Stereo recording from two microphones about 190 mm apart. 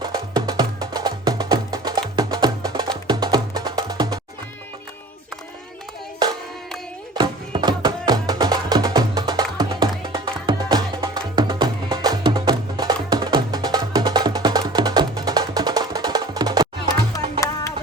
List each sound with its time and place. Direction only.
0.0 s music: 20° right (ahead or behind)
7.2 s music: 25° right (ahead or behind)
16.9 s music: 15° left (ahead or behind)